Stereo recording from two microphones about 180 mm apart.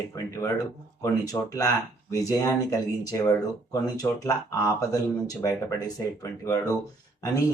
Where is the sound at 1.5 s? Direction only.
20° left (ahead or behind).